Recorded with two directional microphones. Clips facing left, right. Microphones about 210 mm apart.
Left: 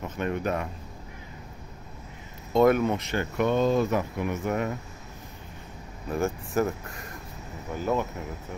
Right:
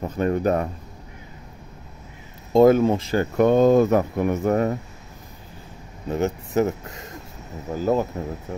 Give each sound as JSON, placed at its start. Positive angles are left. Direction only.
{"t": 0.0, "sound": "speech", "side_deg": -40}
{"t": 2.5, "sound": "speech", "side_deg": -30}
{"t": 6.0, "sound": "speech", "side_deg": -20}
{"t": 7.7, "sound": "speech", "side_deg": -35}